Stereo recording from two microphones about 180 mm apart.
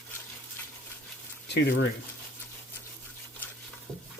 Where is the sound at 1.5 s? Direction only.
70° left (ahead or behind).